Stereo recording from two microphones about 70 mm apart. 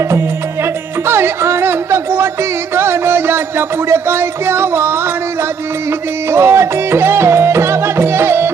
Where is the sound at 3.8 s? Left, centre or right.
Right.